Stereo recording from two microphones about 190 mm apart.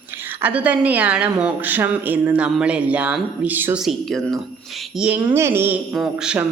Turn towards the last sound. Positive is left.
turn(degrees=-5)  # may be behind; listen again after turning